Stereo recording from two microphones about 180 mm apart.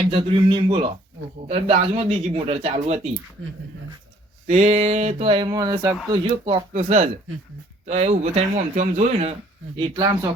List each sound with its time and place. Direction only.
0.1 s speech: 30° right (ahead or behind)
4.4 s speech: 35° right (ahead or behind); by 5.9 s 20° right (ahead or behind)
6.1 s speech: 30° right (ahead or behind)
9.7 s speech: 25° right (ahead or behind)